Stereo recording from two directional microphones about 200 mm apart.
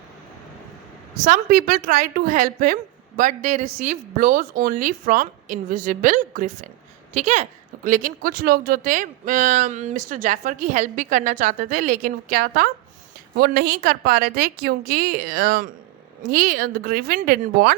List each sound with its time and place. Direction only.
1.2 s a woman's voice: 45° right (ahead or behind)